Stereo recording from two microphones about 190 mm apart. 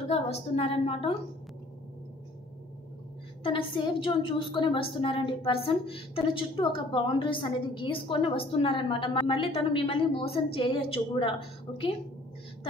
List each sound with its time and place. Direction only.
0.1 s a woman's voice: 30° left (ahead or behind)
3.4 s a woman's voice: 25° left (ahead or behind)